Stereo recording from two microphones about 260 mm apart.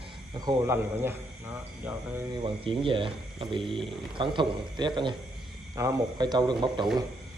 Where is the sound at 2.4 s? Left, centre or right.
Centre.